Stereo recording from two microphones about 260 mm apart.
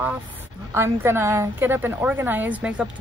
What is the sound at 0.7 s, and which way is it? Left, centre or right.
A woman's voice, centre.